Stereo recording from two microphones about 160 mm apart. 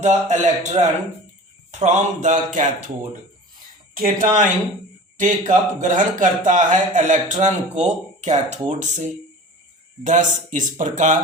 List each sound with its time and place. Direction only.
0.0 s a man's voice: 50° right (ahead or behind)
3.9 s a man's voice: 60° right (ahead or behind)